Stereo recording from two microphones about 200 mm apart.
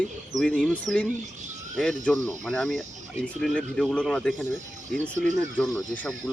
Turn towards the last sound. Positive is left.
turn(degrees=5)  # may be behind; listen again after turning